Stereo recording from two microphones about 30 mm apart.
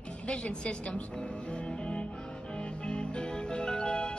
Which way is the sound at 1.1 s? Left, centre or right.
Left.